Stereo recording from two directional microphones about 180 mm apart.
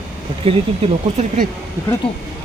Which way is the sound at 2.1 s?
35° left (ahead or behind).